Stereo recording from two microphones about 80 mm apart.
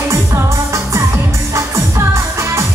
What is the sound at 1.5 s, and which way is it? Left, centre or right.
Music, right.